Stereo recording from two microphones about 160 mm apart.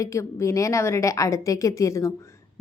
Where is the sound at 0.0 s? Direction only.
20° left (ahead or behind).